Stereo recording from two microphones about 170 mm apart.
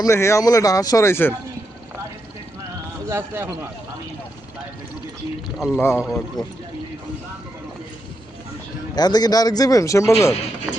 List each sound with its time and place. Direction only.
0.0 s speech: 15° left (ahead or behind)
3.1 s speech: 15° right (ahead or behind)
5.5 s speech: centre (ahead or behind)
9.0 s speech: 25° left (ahead or behind)
10.7 s speech: 10° right (ahead or behind)